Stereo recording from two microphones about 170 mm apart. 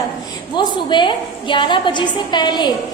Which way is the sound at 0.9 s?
30° left (ahead or behind).